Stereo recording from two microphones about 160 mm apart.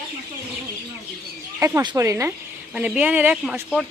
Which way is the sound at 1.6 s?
15° right (ahead or behind).